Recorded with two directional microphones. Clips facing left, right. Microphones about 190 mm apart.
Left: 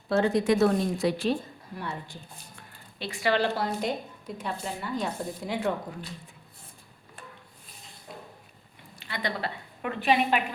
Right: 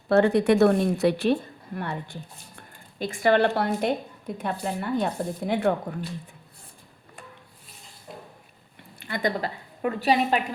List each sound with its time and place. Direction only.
0.1 s a woman's voice: 65° right (ahead or behind)
9.0 s a woman's voice: 50° right (ahead or behind)
9.8 s a woman's voice: 35° right (ahead or behind)